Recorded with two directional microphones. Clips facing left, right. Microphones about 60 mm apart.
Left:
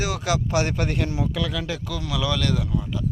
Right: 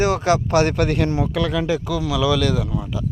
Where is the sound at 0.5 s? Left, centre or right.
Right.